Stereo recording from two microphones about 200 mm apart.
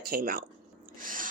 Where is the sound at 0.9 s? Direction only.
45° right (ahead or behind).